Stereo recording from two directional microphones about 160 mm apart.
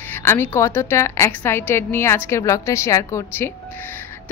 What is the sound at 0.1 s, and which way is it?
Speech, 15° left (ahead or behind).